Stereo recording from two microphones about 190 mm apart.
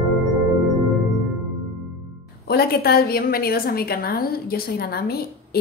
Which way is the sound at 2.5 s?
55° left (ahead or behind).